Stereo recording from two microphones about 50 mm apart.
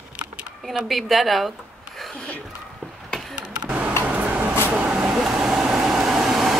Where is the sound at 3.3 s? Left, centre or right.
Right.